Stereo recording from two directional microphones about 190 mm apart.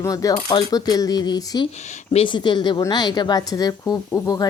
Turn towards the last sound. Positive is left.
turn(degrees=20)  # may be behind; listen again after turning